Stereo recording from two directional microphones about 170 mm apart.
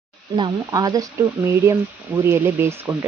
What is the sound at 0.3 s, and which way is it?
Speech, 25° right (ahead or behind).